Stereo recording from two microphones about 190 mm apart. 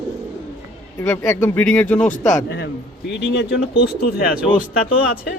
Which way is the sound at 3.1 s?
60° left (ahead or behind).